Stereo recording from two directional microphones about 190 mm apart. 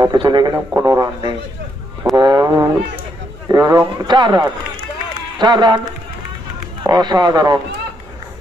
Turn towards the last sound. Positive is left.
turn(degrees=-20)  # may be behind; listen again after turning